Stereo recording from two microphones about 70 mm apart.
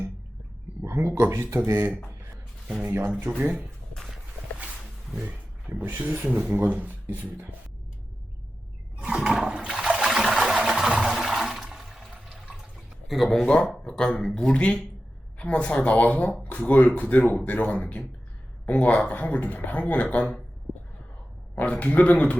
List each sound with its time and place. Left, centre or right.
0.9 s a sound: right
1.3 s speech: right
2.8 s speech: right
3.1 s speech: centre
5.2 s speech: centre
9.0 s toilet flush: centre
13.1 s speech: centre
13.4 s speech: centre
21.5 s speech: left